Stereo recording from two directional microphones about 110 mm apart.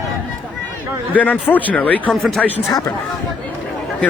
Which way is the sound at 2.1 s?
Centre (ahead or behind).